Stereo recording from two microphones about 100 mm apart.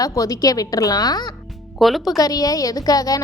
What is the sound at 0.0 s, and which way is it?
A woman's voice, 35° left (ahead or behind).